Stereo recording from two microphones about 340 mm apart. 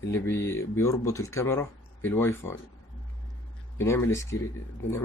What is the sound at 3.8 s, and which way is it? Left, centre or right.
Speech, centre.